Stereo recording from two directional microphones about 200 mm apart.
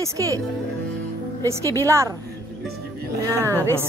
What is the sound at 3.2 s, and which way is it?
Speech, 15° right (ahead or behind).